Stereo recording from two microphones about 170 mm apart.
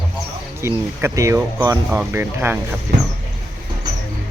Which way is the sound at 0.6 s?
15° right (ahead or behind).